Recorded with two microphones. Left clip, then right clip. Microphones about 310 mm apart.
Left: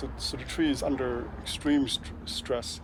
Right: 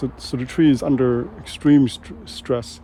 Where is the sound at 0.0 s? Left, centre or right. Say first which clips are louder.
Right 8 dB; right.